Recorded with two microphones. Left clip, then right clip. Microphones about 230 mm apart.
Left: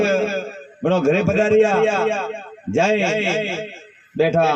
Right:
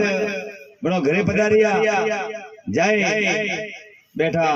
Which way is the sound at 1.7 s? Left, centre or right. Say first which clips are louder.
Left 1 dB; left.